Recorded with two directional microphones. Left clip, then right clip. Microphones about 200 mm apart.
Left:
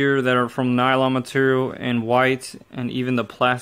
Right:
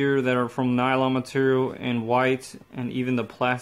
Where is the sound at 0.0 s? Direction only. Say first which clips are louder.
Left 4 dB; 30° left (ahead or behind).